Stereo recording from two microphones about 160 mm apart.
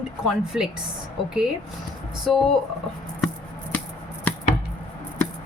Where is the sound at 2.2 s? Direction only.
Centre (ahead or behind).